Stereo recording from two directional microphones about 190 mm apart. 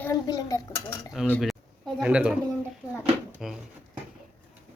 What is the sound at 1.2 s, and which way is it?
A man's voice, 5° right (ahead or behind).